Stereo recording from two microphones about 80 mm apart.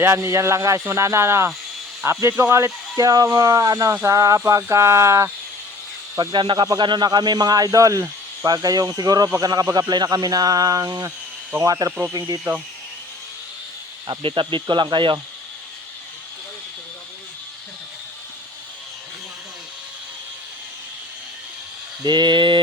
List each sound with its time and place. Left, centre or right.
0.0 s speech: right
6.1 s speech: right
11.9 s speech: centre
14.1 s speech: right
22.0 s speech: right